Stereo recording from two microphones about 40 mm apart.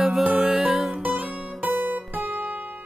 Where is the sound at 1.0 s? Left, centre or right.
Right.